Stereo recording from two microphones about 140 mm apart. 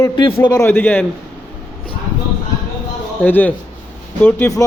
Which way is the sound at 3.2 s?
10° left (ahead or behind).